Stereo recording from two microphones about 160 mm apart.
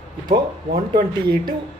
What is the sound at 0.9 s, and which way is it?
Speech, 25° right (ahead or behind).